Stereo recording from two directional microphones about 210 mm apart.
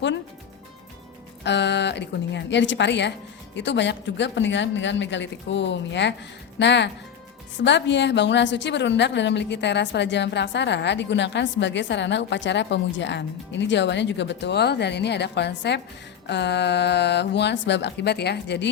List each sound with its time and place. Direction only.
1.5 s a woman's voice: 55° left (ahead or behind)